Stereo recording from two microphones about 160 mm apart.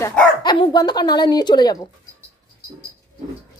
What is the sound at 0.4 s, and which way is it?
A woman's voice, 25° left (ahead or behind).